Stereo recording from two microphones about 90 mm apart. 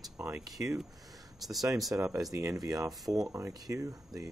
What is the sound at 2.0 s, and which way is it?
Speech, 35° right (ahead or behind).